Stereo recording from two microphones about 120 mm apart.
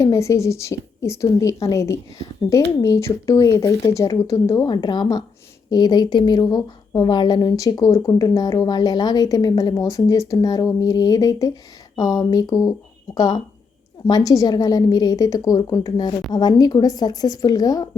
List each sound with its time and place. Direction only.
0.0 s a woman's voice: 25° left (ahead or behind)